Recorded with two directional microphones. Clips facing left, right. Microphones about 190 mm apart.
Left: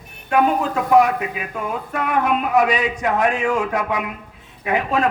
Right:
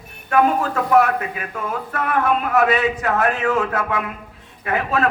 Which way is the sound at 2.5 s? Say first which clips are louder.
Right 1 dB; 15° left (ahead or behind).